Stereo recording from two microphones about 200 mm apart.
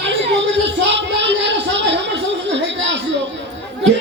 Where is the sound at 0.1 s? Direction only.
60° right (ahead or behind).